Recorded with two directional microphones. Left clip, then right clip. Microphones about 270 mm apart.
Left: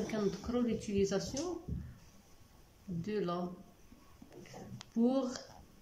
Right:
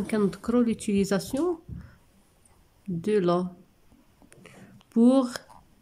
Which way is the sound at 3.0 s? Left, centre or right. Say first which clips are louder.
Right 13 dB; right.